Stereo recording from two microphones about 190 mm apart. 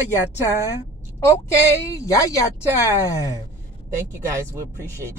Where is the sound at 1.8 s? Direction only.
15° left (ahead or behind).